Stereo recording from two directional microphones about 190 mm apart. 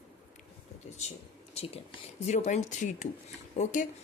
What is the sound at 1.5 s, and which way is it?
A woman's voice, 30° left (ahead or behind).